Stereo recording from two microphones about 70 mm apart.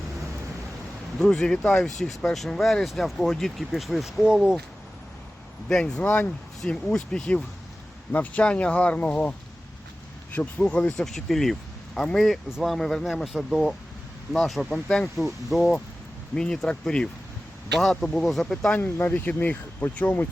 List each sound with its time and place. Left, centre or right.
1.2 s speech: centre
5.6 s speech: centre
10.3 s speech: centre
15.2 s speech: centre
18.8 s speech: left